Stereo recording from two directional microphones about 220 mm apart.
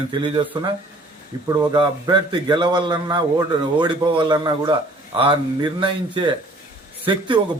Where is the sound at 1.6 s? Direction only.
20° right (ahead or behind).